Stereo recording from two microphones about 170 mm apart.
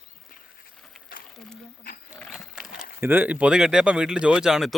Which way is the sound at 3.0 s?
10° right (ahead or behind).